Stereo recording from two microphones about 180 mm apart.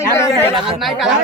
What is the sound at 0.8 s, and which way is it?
Speech, centre (ahead or behind).